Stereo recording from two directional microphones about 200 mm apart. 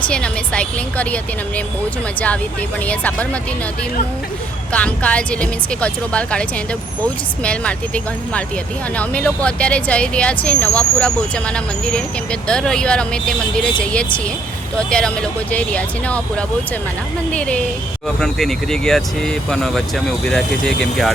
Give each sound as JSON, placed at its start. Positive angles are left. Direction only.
{"t": 0.1, "sound": "speech", "side_deg": 5}
{"t": 2.8, "sound": "speech", "side_deg": 5}
{"t": 4.7, "sound": "speech", "side_deg": 5}
{"t": 7.4, "sound": "speech", "side_deg": 5}